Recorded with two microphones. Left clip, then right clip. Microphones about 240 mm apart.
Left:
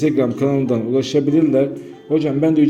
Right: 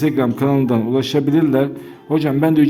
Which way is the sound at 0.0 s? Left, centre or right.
Centre.